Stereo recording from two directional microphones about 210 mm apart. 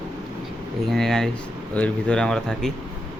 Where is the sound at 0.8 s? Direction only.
Centre (ahead or behind).